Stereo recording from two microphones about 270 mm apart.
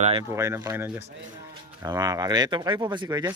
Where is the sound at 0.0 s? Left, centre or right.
Right.